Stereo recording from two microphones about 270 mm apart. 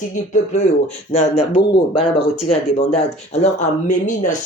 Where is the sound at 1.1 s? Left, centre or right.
Left.